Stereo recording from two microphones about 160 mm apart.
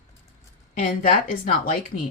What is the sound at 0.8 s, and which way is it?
Speech, 60° left (ahead or behind).